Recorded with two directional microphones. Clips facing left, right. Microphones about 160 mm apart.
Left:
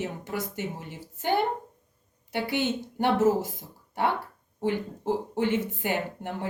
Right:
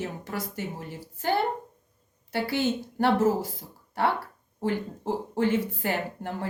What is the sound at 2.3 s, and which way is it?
A woman's voice, 20° left (ahead or behind).